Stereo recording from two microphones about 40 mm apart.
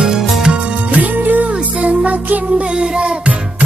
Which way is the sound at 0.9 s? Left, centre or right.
Right.